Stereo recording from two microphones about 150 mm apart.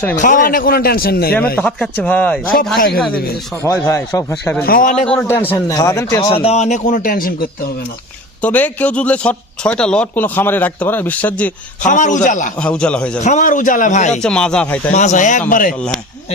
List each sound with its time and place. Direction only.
0.2 s a man's voice: 65° left (ahead or behind); by 1.4 s 90° left
1.5 s a man's voice: 10° left (ahead or behind)
3.6 s a man's voice: 20° left (ahead or behind)
4.6 s speech: 70° left (ahead or behind)
5.0 s speech: 10° left (ahead or behind)
6.2 s speech: 40° left (ahead or behind); by 7.7 s 75° left (ahead or behind)
8.4 s a man's voice: 10° left (ahead or behind)
11.9 s speech: 55° left (ahead or behind)
12.5 s a man's voice: 5° left (ahead or behind)
13.1 s speech: 55° left (ahead or behind)
14.2 s speech: 5° left (ahead or behind)
14.9 s speech: 55° left (ahead or behind)